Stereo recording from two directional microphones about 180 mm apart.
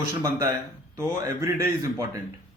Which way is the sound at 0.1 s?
20° right (ahead or behind).